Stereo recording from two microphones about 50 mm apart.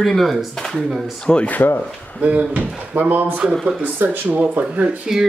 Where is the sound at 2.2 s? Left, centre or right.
Right.